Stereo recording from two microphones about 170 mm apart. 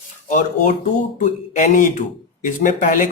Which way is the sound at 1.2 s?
50° left (ahead or behind).